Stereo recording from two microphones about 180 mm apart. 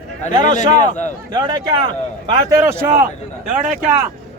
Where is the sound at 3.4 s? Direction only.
45° right (ahead or behind).